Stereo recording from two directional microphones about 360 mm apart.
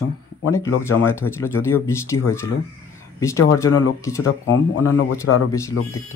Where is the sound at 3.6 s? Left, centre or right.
Centre.